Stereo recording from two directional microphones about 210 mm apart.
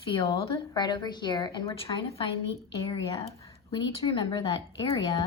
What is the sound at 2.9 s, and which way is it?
Speech, 15° left (ahead or behind).